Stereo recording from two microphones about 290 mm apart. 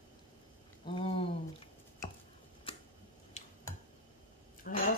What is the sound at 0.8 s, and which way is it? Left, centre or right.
Speech, centre.